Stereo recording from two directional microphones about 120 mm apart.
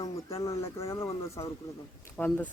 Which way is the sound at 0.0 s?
25° left (ahead or behind).